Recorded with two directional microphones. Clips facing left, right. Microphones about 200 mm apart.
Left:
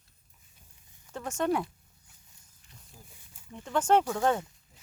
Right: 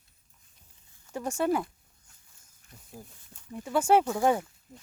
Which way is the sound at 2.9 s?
50° right (ahead or behind).